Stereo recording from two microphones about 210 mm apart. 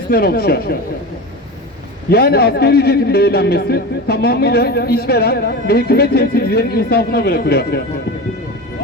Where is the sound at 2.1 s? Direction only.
50° left (ahead or behind).